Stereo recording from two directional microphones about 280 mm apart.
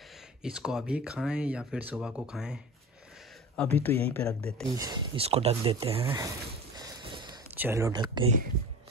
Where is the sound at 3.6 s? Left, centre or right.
Centre.